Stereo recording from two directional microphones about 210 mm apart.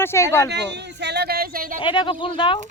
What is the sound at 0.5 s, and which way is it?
Speech, 55° right (ahead or behind).